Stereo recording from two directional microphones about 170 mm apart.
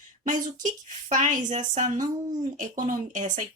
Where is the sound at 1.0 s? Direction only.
45° right (ahead or behind).